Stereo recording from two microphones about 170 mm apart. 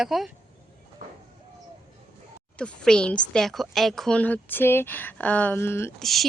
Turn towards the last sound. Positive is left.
turn(degrees=0)  # may be behind; listen again after turning